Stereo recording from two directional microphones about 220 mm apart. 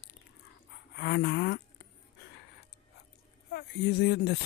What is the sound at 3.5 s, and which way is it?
Speech, 50° left (ahead or behind).